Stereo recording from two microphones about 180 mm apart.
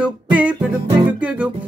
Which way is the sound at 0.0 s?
5° right (ahead or behind).